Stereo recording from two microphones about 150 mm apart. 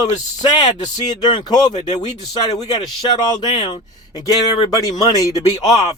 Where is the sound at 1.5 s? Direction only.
25° left (ahead or behind).